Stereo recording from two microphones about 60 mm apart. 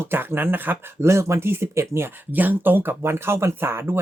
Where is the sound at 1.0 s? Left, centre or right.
Right.